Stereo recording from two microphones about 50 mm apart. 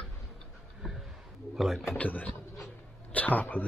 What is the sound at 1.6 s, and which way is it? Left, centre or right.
Speech, centre.